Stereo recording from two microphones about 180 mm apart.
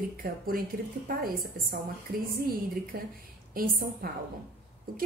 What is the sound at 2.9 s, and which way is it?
A woman's voice, 55° right (ahead or behind).